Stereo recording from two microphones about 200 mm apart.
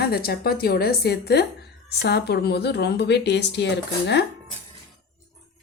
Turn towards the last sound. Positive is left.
turn(degrees=55)  # may be behind; listen again after turning